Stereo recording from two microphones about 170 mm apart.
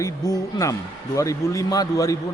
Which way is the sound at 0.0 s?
20° left (ahead or behind).